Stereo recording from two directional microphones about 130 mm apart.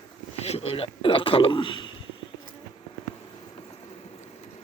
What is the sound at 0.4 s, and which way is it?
Speech, 50° left (ahead or behind).